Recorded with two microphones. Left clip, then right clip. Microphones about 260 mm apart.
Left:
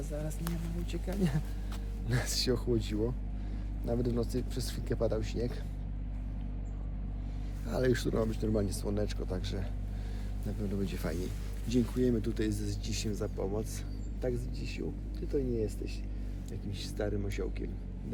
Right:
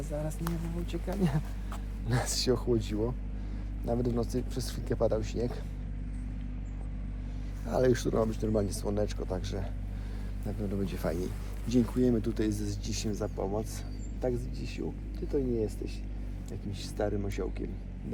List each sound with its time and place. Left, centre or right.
0.1 s speech: centre
7.6 s speech: centre